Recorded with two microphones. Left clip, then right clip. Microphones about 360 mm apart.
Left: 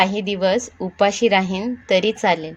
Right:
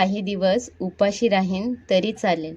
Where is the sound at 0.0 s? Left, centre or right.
Left.